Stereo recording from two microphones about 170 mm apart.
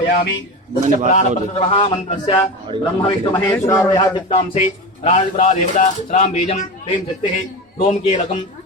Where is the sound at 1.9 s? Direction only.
45° left (ahead or behind).